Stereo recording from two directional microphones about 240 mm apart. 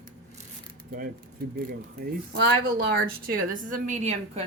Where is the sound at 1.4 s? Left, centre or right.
Right.